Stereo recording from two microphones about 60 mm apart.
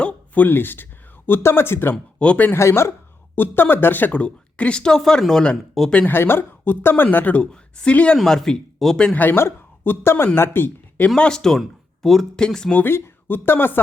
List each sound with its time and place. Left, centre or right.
0.0 s a sound: left
0.4 s a woman's voice: left
2.1 s speech: left
2.5 s speech: left
3.3 s a woman's voice: left; by 5.5 s centre
6.1 s a woman's voice: left; by 8.2 s centre
8.2 s speech: centre
9.1 s a woman's voice: left
11.2 s speech: centre
12.9 s speech: left